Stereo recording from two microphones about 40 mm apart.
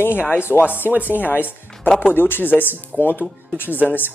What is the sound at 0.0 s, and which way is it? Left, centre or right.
Speech, left.